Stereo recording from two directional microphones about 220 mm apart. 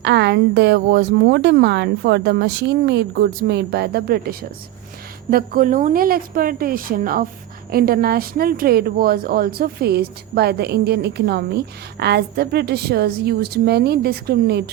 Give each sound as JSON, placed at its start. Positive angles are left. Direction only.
{"t": 0.0, "sound": "speech", "side_deg": -50}